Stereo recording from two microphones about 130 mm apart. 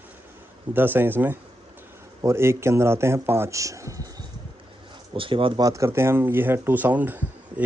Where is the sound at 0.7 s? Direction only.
15° right (ahead or behind).